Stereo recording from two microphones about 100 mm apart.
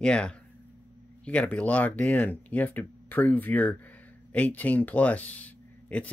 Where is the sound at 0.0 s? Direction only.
10° left (ahead or behind).